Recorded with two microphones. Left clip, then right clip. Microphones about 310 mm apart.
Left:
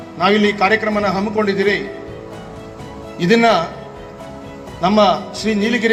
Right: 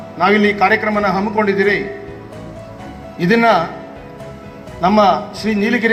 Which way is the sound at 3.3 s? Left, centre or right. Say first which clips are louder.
Right 1 dB; left.